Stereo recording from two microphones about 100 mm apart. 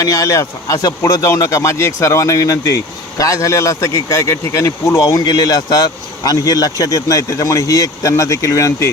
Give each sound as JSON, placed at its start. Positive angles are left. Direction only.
{"t": 0.0, "sound": "speech", "side_deg": 35}
{"t": 5.2, "sound": "speech", "side_deg": 40}